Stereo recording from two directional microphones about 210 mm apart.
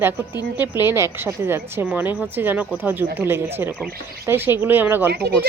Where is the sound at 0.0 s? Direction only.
10° right (ahead or behind).